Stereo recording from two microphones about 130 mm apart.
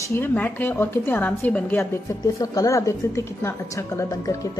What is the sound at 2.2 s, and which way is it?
A woman's voice, 25° left (ahead or behind).